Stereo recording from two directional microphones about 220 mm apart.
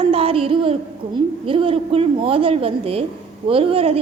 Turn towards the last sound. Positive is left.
turn(degrees=-25)  # may be behind; listen again after turning